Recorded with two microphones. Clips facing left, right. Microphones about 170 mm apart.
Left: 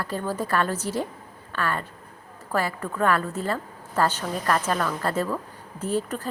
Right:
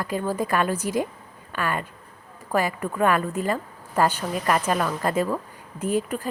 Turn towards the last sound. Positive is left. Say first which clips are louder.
# right 2 dB
turn(degrees=-15)  # may be behind; listen again after turning